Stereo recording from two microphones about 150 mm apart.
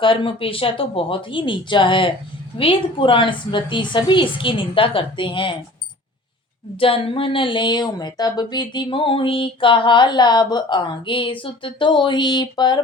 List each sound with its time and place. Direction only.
0.0 s speech: 35° left (ahead or behind)
6.7 s speech: 40° left (ahead or behind)